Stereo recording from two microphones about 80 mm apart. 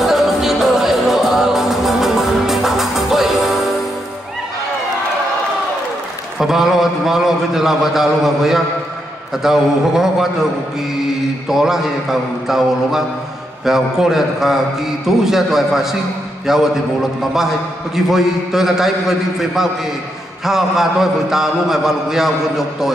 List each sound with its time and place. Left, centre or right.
0.0 s music: centre
6.3 s a man's voice: centre
11.4 s a man's voice: centre